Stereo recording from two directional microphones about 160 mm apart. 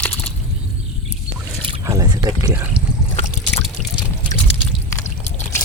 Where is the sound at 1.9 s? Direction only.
25° right (ahead or behind).